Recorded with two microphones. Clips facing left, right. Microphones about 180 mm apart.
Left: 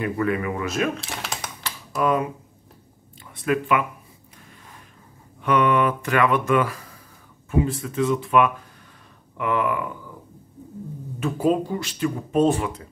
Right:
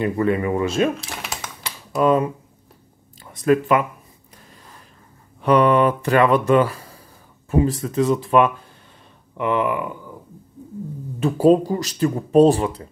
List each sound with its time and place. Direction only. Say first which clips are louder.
0.0 s speech: right 4 dB; 30° right (ahead or behind)
0.9 s typing: even; centre (ahead or behind)
1.6 s typing: right 5 dB; 30° right (ahead or behind)
3.3 s speech: right 5 dB; 40° right (ahead or behind)
5.4 s speech: right 4 dB; 35° right (ahead or behind)
9.4 s speech: right 3 dB; 25° right (ahead or behind)
11.1 s speech: right 6 dB; 35° right (ahead or behind)